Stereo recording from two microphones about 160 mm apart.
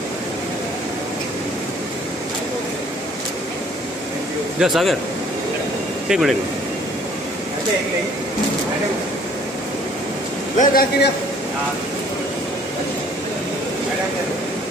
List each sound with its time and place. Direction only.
4.6 s speech: centre (ahead or behind)
6.0 s speech: centre (ahead or behind)
10.6 s a man's voice: 65° left (ahead or behind)